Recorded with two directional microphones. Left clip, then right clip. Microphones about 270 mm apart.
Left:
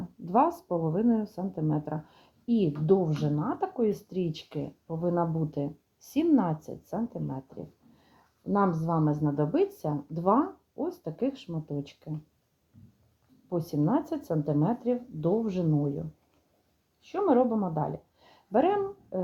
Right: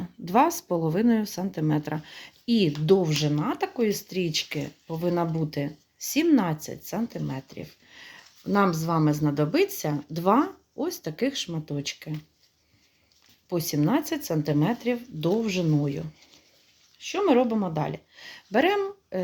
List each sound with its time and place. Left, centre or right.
0.3 s speech: right
13.5 s speech: right